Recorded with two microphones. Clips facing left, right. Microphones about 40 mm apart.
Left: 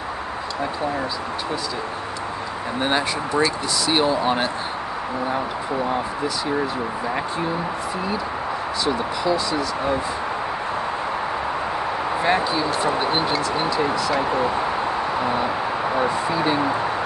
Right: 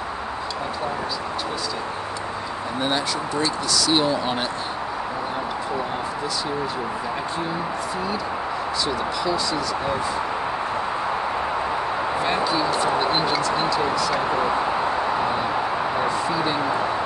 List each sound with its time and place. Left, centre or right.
3.4 s speech: centre
8.8 s speech: centre
12.3 s speech: centre
16.0 s speech: centre